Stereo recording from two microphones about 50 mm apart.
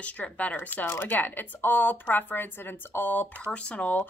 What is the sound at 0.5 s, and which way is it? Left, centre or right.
Speech, left.